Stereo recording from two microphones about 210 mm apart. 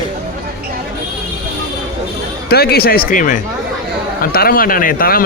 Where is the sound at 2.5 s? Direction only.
50° left (ahead or behind).